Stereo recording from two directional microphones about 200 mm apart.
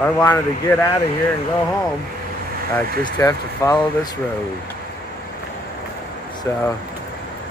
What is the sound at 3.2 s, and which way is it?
Speech, 15° left (ahead or behind).